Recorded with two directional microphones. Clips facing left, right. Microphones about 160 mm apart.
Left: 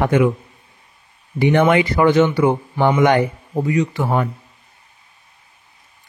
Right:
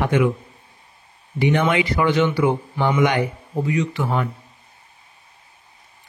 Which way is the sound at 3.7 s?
40° left (ahead or behind).